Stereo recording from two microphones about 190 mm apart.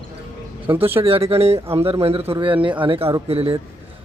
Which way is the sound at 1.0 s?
30° right (ahead or behind).